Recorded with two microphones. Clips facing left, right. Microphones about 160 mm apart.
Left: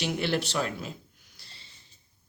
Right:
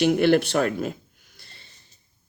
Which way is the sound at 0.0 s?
55° right (ahead or behind).